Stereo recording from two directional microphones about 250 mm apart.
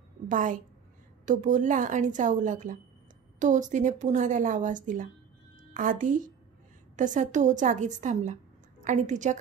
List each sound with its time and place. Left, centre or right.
0.3 s a woman's voice: right